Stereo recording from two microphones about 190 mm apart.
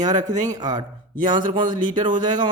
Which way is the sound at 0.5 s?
20° right (ahead or behind).